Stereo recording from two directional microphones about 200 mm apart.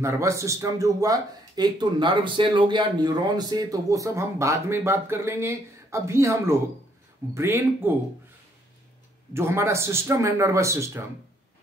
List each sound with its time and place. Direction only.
0.0 s speech: 15° right (ahead or behind)
9.3 s speech: 10° right (ahead or behind)